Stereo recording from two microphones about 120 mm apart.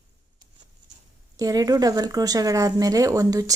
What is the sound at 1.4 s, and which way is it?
Speech, 30° right (ahead or behind).